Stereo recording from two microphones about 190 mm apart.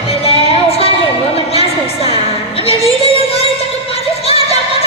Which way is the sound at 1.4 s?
30° left (ahead or behind).